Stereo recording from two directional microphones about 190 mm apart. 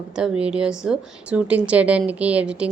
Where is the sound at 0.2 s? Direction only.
5° right (ahead or behind).